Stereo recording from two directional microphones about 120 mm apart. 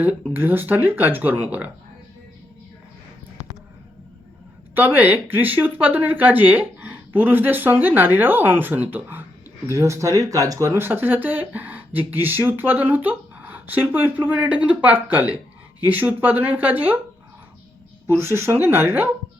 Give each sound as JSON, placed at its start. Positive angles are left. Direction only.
{"t": 0.3, "sound": "speech", "side_deg": -15}
{"t": 4.7, "sound": "speech", "side_deg": -15}
{"t": 10.8, "sound": "speech", "side_deg": -15}
{"t": 18.0, "sound": "speech", "side_deg": -20}